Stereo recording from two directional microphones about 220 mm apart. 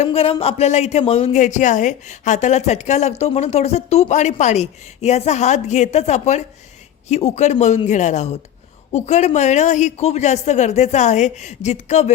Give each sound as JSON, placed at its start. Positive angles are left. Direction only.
{"t": 0.0, "sound": "speech", "side_deg": 25}